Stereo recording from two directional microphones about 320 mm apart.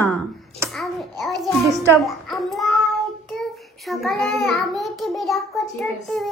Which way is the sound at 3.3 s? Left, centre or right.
Centre.